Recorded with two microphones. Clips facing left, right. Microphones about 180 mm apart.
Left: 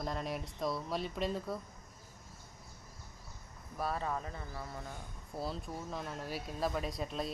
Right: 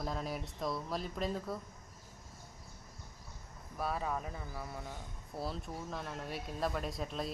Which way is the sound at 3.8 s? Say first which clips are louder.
Even; 5° right (ahead or behind).